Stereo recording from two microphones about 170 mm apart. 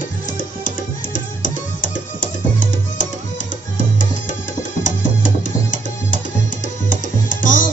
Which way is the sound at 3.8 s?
50° left (ahead or behind).